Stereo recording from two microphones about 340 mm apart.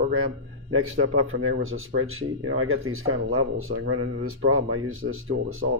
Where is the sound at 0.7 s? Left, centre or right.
Right.